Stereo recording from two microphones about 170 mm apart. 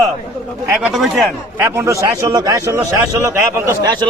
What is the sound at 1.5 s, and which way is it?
A man's voice, 15° right (ahead or behind).